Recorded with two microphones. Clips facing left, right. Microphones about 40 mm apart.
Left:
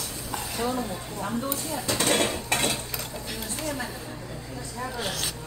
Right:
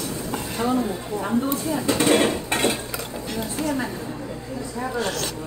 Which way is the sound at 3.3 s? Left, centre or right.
Centre.